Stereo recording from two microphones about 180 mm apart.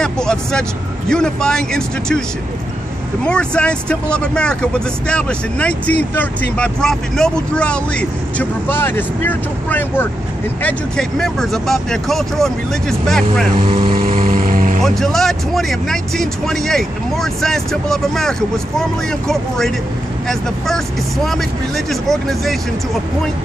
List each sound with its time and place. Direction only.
0.0 s speech: 5° left (ahead or behind)
3.3 s speech: 5° left (ahead or behind)
13.7 s speech: 35° right (ahead or behind)
13.9 s vehicle: 50° right (ahead or behind)
14.8 s speech: centre (ahead or behind)